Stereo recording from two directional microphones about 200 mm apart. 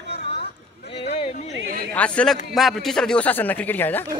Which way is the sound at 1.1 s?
30° left (ahead or behind).